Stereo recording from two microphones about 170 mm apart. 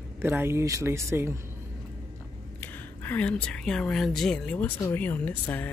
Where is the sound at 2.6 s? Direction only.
10° left (ahead or behind).